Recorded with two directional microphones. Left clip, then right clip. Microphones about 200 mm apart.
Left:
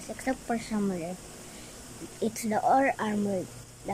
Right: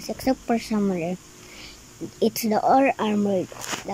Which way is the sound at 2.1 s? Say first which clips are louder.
Right 7 dB; 5° right (ahead or behind).